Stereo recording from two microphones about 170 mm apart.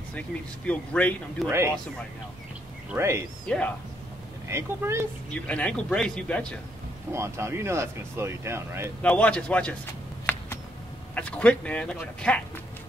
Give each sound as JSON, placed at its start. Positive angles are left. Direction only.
{"t": 0.7, "sound": "a man's voice", "side_deg": 10}
{"t": 1.5, "sound": "speech", "side_deg": -15}
{"t": 2.9, "sound": "speech", "side_deg": -15}
{"t": 3.4, "sound": "a man's voice", "side_deg": 5}
{"t": 4.5, "sound": "speech", "side_deg": -15}
{"t": 5.3, "sound": "a man's voice", "side_deg": 5}
{"t": 7.1, "sound": "speech", "side_deg": -15}
{"t": 9.0, "sound": "a man's voice", "side_deg": 10}
{"t": 10.3, "sound": "a sound", "side_deg": 10}
{"t": 11.1, "sound": "a man's voice", "side_deg": 5}